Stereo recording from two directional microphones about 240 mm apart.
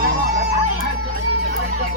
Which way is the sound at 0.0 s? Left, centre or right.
Right.